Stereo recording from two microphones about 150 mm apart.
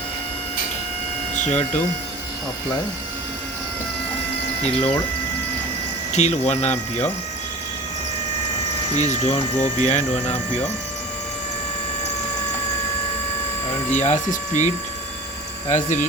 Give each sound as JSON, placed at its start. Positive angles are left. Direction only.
{"t": 1.4, "sound": "speech", "side_deg": 50}
{"t": 4.6, "sound": "speech", "side_deg": 40}
{"t": 6.1, "sound": "speech", "side_deg": 50}
{"t": 9.0, "sound": "speech", "side_deg": 50}
{"t": 13.9, "sound": "speech", "side_deg": 50}
{"t": 15.7, "sound": "speech", "side_deg": 55}